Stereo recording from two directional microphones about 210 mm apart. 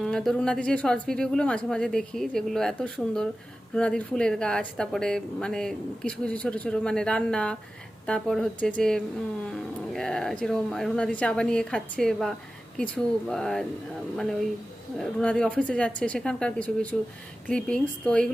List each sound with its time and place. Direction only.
0.0 s speech: centre (ahead or behind)
14.9 s speech: 5° left (ahead or behind)